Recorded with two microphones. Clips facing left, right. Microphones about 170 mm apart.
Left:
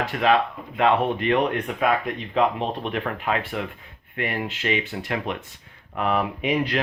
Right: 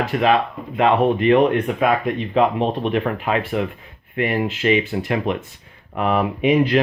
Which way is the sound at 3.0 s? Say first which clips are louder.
Right 5 dB; 15° right (ahead or behind).